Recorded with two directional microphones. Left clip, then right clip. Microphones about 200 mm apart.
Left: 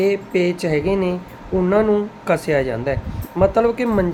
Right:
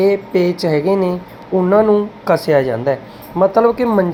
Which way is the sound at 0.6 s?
5° right (ahead or behind).